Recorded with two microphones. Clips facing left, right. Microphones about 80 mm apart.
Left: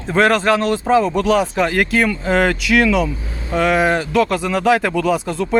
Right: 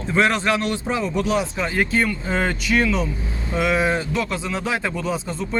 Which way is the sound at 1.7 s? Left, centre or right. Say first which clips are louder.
Left 4 dB; left.